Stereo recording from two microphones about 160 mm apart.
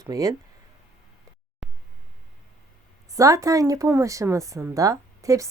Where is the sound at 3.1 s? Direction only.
20° right (ahead or behind).